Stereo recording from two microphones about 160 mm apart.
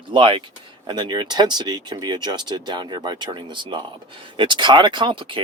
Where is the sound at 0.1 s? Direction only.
35° right (ahead or behind).